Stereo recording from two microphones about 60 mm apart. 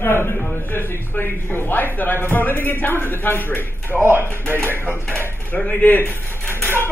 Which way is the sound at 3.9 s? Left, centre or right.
Right.